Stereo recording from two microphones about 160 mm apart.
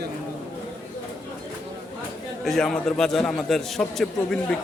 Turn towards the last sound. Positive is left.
turn(degrees=0)  # may be behind; listen again after turning